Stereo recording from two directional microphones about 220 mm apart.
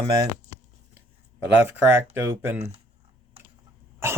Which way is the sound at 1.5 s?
10° right (ahead or behind).